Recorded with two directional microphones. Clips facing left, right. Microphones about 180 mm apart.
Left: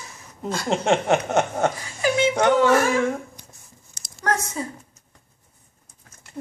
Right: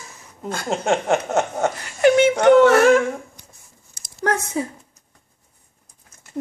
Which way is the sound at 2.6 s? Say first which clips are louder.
Right 6 dB; 70° right (ahead or behind).